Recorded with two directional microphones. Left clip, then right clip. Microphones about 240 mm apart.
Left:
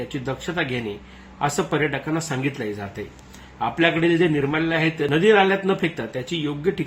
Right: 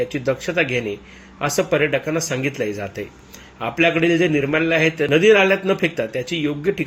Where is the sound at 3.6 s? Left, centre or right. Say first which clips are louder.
Right 2 dB; centre.